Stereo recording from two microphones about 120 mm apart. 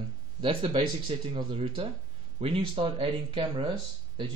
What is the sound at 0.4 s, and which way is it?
Speech, 45° right (ahead or behind).